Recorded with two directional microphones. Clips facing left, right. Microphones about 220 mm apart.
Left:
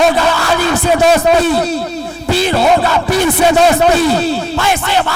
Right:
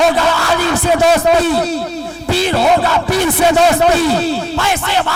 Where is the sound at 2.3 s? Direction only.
15° left (ahead or behind).